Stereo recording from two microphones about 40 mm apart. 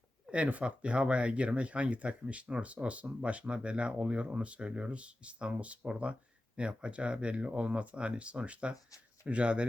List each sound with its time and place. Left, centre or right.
0.3 s speech: right